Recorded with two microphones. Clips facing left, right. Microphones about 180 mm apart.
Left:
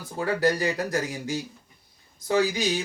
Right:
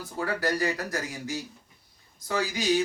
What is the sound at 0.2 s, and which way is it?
Speech, 20° left (ahead or behind).